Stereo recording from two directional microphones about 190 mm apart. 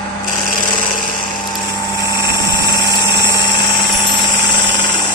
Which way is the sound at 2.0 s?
20° left (ahead or behind).